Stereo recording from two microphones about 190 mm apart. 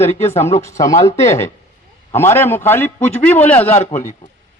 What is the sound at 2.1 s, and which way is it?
A man's voice, 10° left (ahead or behind).